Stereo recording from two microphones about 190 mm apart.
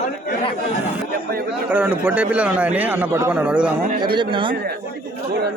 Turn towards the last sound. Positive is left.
turn(degrees=-25)  # may be behind; listen again after turning